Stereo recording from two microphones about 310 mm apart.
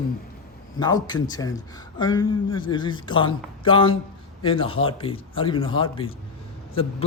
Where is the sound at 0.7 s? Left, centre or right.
Centre.